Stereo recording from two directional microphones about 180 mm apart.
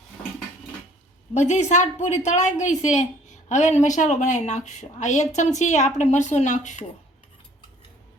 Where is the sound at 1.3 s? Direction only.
40° left (ahead or behind).